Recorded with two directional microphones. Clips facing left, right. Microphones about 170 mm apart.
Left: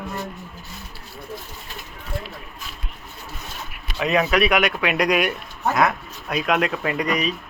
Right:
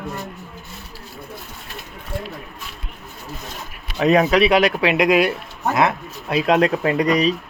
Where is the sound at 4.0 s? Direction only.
35° right (ahead or behind).